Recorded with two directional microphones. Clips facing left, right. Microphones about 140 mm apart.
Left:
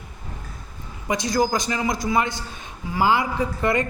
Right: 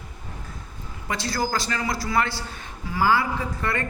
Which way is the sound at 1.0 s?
15° left (ahead or behind).